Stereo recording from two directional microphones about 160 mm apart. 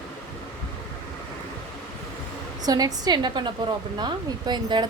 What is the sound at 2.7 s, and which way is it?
A woman's voice, 25° right (ahead or behind).